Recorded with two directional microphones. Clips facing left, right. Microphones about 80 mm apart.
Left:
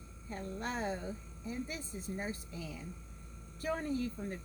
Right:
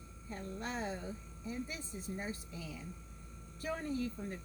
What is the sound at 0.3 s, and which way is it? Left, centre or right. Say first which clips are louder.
Speech: left 2 dB; left.